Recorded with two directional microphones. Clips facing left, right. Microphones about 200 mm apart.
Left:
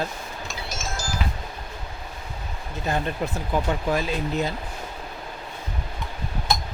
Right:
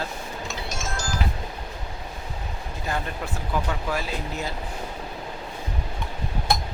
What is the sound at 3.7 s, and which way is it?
Speech, 20° left (ahead or behind).